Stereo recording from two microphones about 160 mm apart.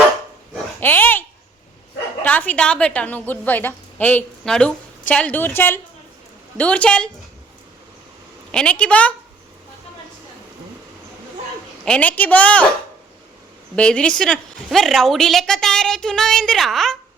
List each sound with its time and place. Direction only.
0.8 s a sound: 10° left (ahead or behind)
2.2 s a woman's voice: 10° left (ahead or behind)
8.5 s a woman's voice: 10° left (ahead or behind)
11.9 s a woman's voice: 10° left (ahead or behind)
13.7 s a woman's voice: 5° left (ahead or behind)